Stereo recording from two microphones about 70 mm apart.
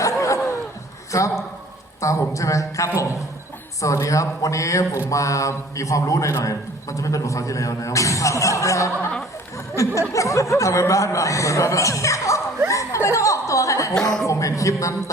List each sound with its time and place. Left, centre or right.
0.0 s a sound: left
1.1 s a man's voice: left
10.1 s a man's voice: left
12.6 s chuckle: left
13.9 s speech: centre
14.3 s a man's voice: left